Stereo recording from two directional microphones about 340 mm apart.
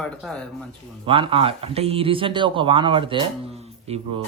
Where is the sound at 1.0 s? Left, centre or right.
Centre.